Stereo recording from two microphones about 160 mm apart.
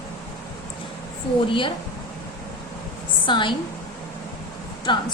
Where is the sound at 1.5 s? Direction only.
30° left (ahead or behind).